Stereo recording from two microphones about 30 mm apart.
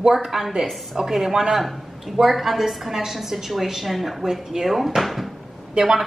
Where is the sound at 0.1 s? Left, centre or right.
Centre.